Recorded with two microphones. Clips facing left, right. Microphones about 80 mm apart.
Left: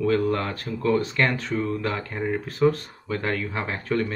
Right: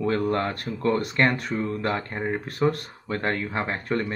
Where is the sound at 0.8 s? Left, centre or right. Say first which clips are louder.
Left 2 dB; right.